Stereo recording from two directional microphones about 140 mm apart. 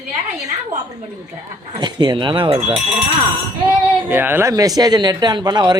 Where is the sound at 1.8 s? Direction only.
30° right (ahead or behind).